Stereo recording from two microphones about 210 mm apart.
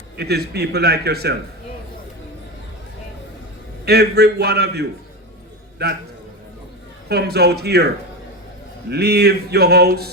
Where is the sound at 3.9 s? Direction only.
50° right (ahead or behind).